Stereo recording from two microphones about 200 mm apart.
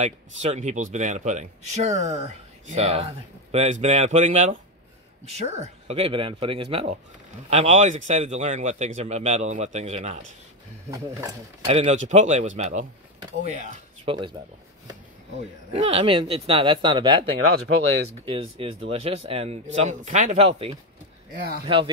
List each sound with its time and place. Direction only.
0.0 s speech: 35° right (ahead or behind)
11.6 s speech: 30° right (ahead or behind)
14.0 s speech: 25° right (ahead or behind)
15.7 s speech: 30° right (ahead or behind)
18.3 s speech: 30° right (ahead or behind)